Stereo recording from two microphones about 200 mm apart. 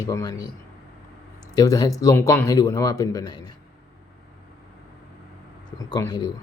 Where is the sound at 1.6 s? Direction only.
20° left (ahead or behind).